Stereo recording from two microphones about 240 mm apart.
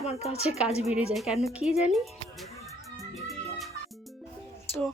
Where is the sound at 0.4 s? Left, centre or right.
Centre.